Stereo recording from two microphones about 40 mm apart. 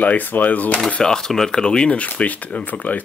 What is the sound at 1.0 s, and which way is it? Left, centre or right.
Speech, centre.